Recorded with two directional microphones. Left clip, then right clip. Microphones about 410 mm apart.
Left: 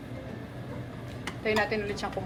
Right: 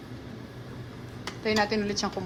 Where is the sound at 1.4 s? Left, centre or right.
Centre.